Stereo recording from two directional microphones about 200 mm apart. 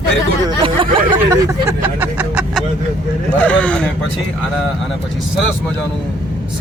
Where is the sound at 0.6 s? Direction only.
25° right (ahead or behind); by 2.6 s 5° right (ahead or behind).